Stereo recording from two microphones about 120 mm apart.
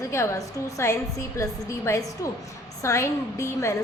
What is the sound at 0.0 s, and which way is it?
A woman's voice, 25° left (ahead or behind).